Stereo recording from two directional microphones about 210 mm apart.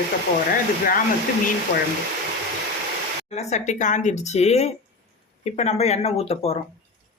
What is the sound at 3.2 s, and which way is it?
Speech, 30° left (ahead or behind).